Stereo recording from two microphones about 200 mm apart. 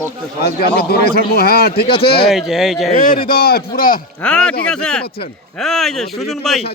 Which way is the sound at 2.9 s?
40° left (ahead or behind).